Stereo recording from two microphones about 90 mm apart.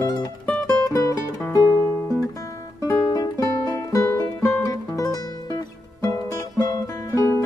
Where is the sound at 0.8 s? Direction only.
40° left (ahead or behind).